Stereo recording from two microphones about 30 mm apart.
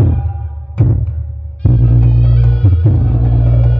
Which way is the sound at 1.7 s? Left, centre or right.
Left.